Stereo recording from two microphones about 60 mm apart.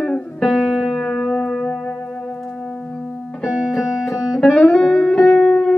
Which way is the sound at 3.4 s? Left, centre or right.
Centre.